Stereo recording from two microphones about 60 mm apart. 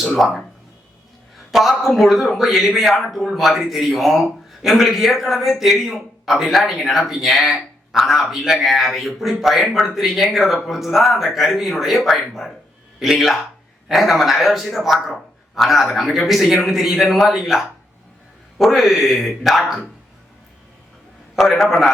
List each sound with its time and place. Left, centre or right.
0.2 s a man's voice: centre
1.5 s a man's voice: centre
21.3 s a man's voice: centre